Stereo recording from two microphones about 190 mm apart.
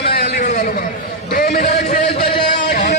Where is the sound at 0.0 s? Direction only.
55° left (ahead or behind).